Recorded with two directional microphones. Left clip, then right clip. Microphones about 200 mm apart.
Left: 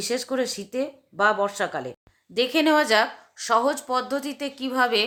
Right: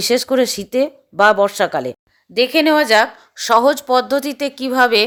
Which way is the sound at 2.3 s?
25° right (ahead or behind).